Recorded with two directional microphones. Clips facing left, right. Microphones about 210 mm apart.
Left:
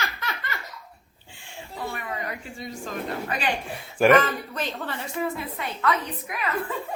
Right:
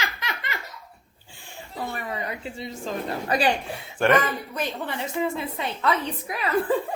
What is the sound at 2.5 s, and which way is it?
Speech, 30° right (ahead or behind).